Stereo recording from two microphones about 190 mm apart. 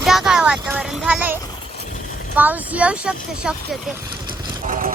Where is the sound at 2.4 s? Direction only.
10° right (ahead or behind).